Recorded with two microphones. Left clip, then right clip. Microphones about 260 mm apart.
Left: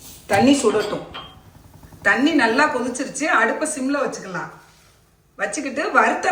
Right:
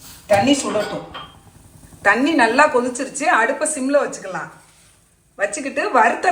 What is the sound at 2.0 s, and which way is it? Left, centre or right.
Speech, centre.